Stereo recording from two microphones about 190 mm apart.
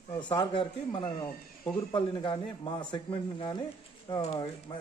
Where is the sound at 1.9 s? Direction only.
25° left (ahead or behind).